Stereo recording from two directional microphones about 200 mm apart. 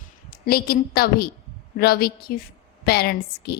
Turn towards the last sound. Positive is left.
turn(degrees=55)  # may be behind; listen again after turning